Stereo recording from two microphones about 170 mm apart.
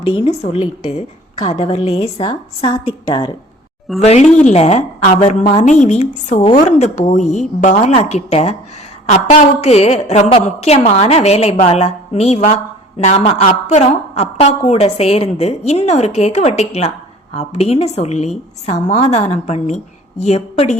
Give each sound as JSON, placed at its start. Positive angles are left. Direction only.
{"t": 0.1, "sound": "a woman's voice", "side_deg": 35}